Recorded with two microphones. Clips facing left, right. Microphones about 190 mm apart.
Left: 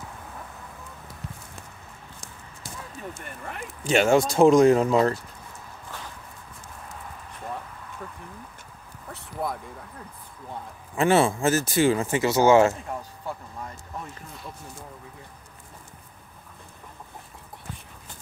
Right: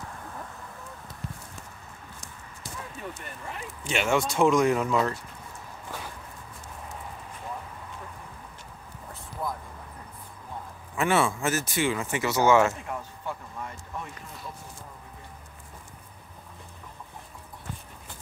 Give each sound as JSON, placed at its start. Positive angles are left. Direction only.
{"t": 3.8, "sound": "speech", "side_deg": 40}
{"t": 9.1, "sound": "a sound", "side_deg": 75}
{"t": 11.0, "sound": "speech", "side_deg": 30}
{"t": 13.3, "sound": "vehicle", "side_deg": 35}